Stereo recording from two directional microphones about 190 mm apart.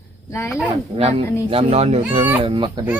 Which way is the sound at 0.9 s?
30° right (ahead or behind).